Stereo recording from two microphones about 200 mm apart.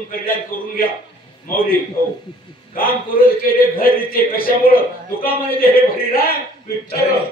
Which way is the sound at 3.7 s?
45° left (ahead or behind).